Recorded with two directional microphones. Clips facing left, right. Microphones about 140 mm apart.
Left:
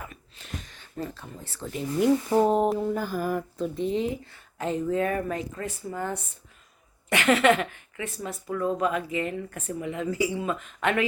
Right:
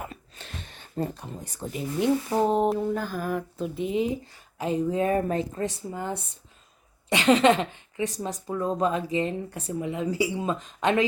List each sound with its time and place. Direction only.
0.0 s a sound: 30° right (ahead or behind)
1.1 s speech: 20° right (ahead or behind)
1.7 s speech: centre (ahead or behind)
3.6 s speech: 5° right (ahead or behind)